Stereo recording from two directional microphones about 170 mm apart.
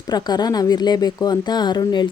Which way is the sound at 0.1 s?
25° left (ahead or behind).